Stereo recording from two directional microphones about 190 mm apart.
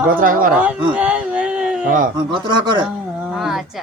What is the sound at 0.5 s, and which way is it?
Speech, 5° right (ahead or behind).